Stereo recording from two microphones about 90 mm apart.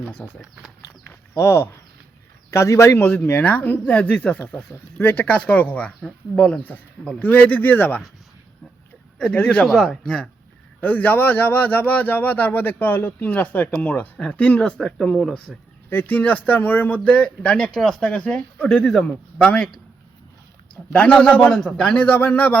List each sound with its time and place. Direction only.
0.2 s speech: 15° left (ahead or behind)
1.3 s speech: 30° left (ahead or behind)
3.2 s speech: 20° left (ahead or behind)
9.3 s speech: 15° left (ahead or behind)
9.6 s speech: 5° left (ahead or behind)
10.8 s speech: 20° left (ahead or behind)
15.9 s speech: 20° left (ahead or behind)
20.9 s speech: 10° left (ahead or behind)